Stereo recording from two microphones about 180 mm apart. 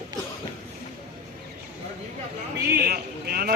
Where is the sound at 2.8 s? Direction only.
55° right (ahead or behind).